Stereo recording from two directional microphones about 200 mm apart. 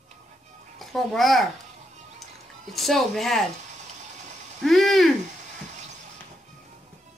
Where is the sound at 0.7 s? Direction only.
Centre (ahead or behind).